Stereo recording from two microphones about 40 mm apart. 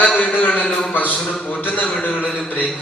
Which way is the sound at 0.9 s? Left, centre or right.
Left.